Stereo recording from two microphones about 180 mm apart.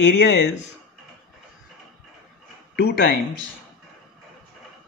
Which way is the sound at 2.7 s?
70° left (ahead or behind).